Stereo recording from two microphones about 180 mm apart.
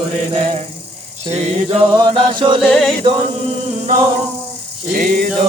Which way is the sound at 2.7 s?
5° left (ahead or behind).